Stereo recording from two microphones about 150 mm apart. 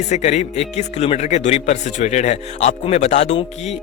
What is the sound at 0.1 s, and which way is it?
Speech, 50° left (ahead or behind).